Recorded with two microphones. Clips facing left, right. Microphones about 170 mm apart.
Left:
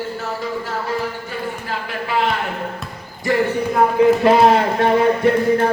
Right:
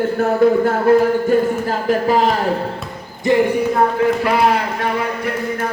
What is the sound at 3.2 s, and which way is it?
Speech, 15° right (ahead or behind).